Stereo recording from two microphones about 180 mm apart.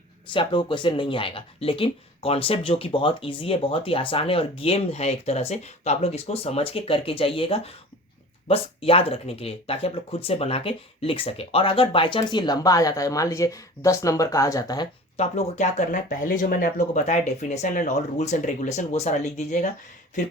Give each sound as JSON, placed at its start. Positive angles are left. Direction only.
{"t": 0.3, "sound": "speech", "side_deg": 25}
{"t": 15.2, "sound": "speech", "side_deg": 40}